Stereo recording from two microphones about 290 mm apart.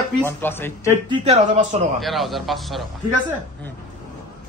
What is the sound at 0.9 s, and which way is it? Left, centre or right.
Speech, centre.